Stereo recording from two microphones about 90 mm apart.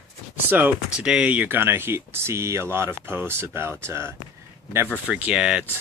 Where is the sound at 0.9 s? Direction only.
10° right (ahead or behind); by 4.1 s 30° right (ahead or behind).